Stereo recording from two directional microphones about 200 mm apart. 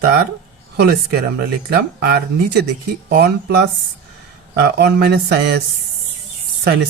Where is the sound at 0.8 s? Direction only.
50° right (ahead or behind).